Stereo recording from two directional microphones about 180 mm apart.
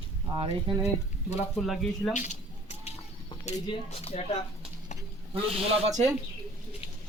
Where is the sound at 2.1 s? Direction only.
40° left (ahead or behind).